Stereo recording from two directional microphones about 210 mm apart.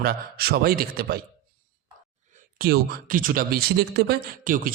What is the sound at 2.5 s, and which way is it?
Speech, 45° right (ahead or behind).